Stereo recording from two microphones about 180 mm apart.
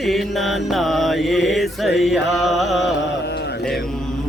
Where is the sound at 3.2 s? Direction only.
65° left (ahead or behind).